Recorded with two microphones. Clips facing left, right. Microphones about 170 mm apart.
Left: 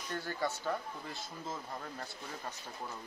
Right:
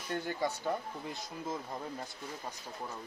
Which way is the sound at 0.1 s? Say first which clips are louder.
Right 3 dB; 15° right (ahead or behind).